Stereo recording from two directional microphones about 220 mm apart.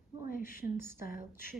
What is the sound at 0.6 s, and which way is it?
Speech, 10° right (ahead or behind).